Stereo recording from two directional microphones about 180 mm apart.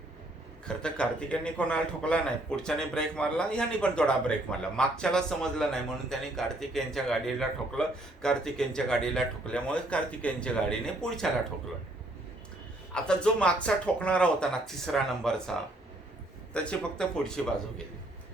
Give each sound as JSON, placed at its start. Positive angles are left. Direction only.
{"t": 0.6, "sound": "a man's voice", "side_deg": 5}
{"t": 12.9, "sound": "a man's voice", "side_deg": 5}